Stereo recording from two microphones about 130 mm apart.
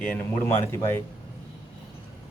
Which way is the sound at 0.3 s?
20° left (ahead or behind).